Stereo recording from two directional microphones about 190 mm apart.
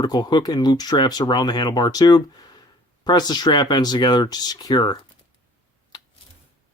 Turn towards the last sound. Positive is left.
turn(degrees=20)  # may be behind; listen again after turning